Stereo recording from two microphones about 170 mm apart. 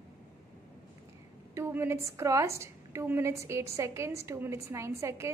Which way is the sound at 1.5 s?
15° right (ahead or behind).